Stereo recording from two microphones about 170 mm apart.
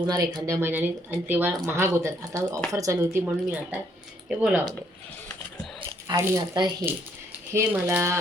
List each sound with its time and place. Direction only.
0.0 s speech: 20° right (ahead or behind); by 4.7 s 5° right (ahead or behind)
6.1 s speech: 20° right (ahead or behind)